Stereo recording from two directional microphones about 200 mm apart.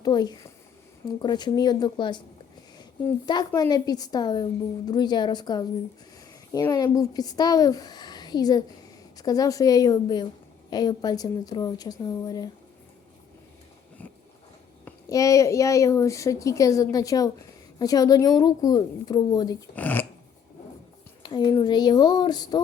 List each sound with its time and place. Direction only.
0.0 s speech: 20° left (ahead or behind)
3.2 s a woman's voice: 20° left (ahead or behind)
14.0 s a sound: 5° left (ahead or behind)
14.8 s a woman's voice: 15° left (ahead or behind)
19.7 s speech: 10° left (ahead or behind)
21.2 s speech: 20° left (ahead or behind)